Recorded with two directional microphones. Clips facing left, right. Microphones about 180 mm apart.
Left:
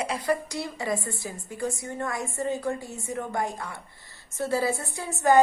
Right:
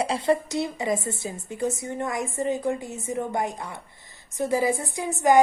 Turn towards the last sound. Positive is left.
turn(degrees=-15)  # may be behind; listen again after turning